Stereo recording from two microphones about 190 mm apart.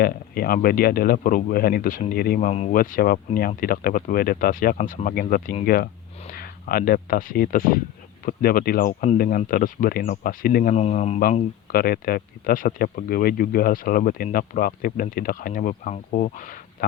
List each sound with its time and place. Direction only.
0.0 s speech: 50° left (ahead or behind); by 11.2 s 35° left (ahead or behind)
11.7 s speech: 50° left (ahead or behind)